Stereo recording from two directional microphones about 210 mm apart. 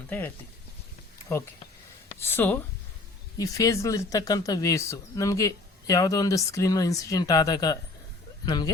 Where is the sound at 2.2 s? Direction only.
10° left (ahead or behind).